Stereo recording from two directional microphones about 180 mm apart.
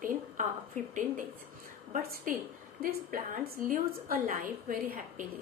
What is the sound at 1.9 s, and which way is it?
A woman's voice, 50° right (ahead or behind).